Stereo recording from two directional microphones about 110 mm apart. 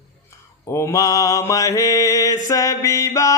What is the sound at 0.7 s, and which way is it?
Mantra, 25° left (ahead or behind).